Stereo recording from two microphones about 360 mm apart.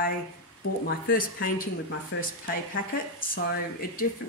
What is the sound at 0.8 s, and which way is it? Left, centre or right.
Speech, left.